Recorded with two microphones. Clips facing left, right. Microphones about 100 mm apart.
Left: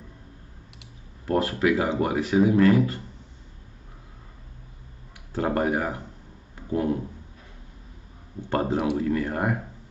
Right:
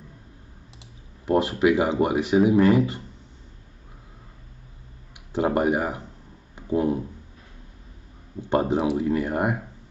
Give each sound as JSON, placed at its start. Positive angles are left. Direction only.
{"t": 1.2, "sound": "speech", "side_deg": -15}
{"t": 5.3, "sound": "speech", "side_deg": -15}
{"t": 6.5, "sound": "a sound", "side_deg": -20}
{"t": 8.5, "sound": "speech", "side_deg": -20}